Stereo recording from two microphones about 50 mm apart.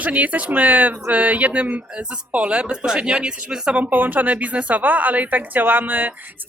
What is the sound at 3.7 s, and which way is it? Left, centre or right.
Speech, right.